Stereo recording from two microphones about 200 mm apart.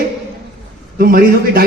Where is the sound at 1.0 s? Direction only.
50° right (ahead or behind).